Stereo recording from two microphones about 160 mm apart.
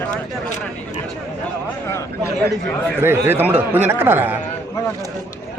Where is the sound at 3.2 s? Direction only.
15° right (ahead or behind).